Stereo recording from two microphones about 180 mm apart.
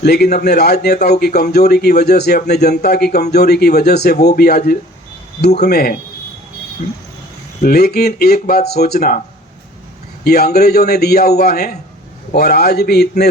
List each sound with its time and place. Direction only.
0.0 s a man's voice: 60° left (ahead or behind)
7.6 s a man's voice: 60° left (ahead or behind)
10.2 s a man's voice: 60° left (ahead or behind)